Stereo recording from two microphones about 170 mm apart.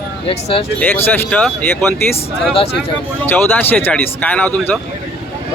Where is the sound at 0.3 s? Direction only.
35° left (ahead or behind).